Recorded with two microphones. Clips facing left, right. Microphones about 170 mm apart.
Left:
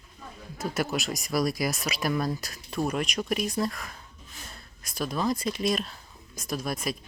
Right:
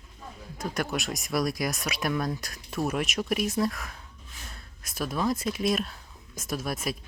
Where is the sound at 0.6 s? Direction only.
5° left (ahead or behind).